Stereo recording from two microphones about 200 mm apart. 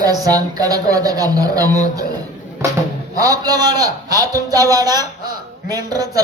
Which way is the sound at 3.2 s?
20° right (ahead or behind).